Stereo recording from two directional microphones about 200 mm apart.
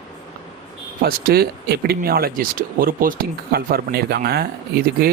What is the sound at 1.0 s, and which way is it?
Speech, 50° right (ahead or behind).